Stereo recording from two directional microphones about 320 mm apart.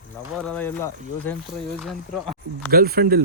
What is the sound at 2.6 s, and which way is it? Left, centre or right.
Speech, right.